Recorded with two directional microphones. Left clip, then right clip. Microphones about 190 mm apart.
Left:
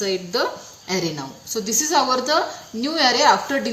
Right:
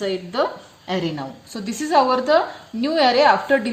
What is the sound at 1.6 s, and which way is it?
A woman's voice, 40° right (ahead or behind).